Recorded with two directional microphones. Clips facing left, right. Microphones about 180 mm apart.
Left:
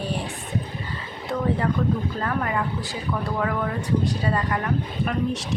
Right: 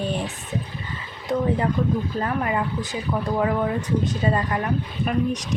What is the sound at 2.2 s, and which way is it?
Speech, 20° right (ahead or behind).